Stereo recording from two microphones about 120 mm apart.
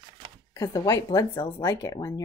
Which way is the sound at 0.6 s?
30° left (ahead or behind).